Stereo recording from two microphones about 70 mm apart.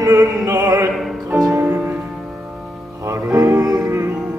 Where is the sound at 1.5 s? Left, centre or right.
Right.